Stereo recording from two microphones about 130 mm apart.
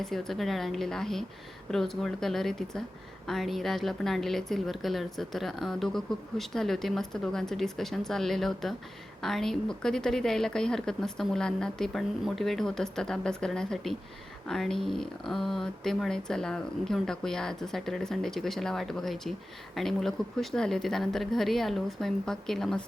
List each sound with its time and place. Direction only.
0.0 s speech: centre (ahead or behind)